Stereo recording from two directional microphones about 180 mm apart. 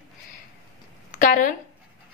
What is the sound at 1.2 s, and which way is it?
Speech, 50° left (ahead or behind).